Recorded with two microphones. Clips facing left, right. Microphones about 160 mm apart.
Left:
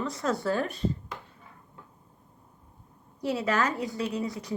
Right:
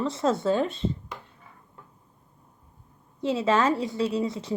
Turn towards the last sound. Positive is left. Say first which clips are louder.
# right 5 dB
turn(degrees=-25)  # may be behind; listen again after turning